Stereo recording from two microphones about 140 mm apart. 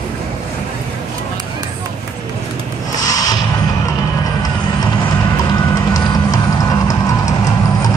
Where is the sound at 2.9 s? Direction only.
25° left (ahead or behind).